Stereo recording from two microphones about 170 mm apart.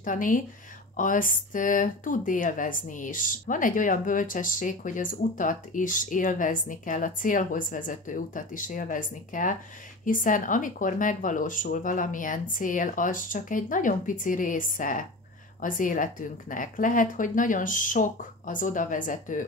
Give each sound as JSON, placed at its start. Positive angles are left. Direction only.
{"t": 0.0, "sound": "speech", "side_deg": 50}